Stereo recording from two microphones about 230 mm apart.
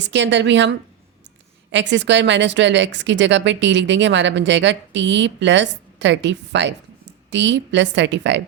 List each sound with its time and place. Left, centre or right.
0.0 s speech: right